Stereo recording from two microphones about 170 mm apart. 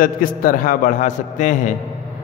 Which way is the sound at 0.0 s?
55° left (ahead or behind).